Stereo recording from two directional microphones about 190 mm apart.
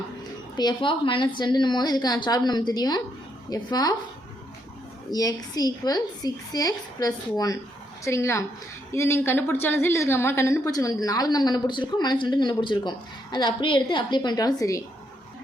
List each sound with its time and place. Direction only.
0.5 s a woman's voice: 20° left (ahead or behind)
5.1 s a woman's voice: 20° left (ahead or behind)